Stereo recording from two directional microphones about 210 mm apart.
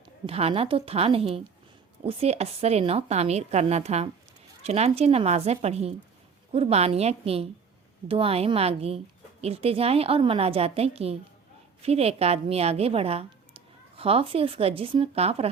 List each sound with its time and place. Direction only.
0.3 s a woman's voice: 25° right (ahead or behind)